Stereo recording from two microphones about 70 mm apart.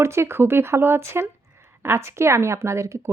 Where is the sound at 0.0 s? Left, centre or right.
Right.